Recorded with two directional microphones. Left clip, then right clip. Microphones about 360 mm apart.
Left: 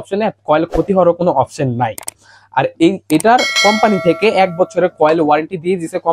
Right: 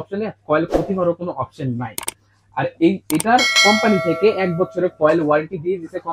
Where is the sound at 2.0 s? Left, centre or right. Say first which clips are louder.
Right 2 dB; centre.